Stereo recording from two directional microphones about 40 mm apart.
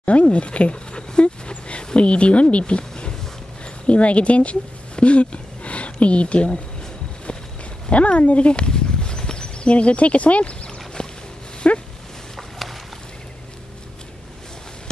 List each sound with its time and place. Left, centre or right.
0.0 s speech: left
1.5 s a sound: left
2.0 s speech: left
7.9 s speech: left
11.0 s a sound: left
11.6 s dog: left
12.4 s boat: centre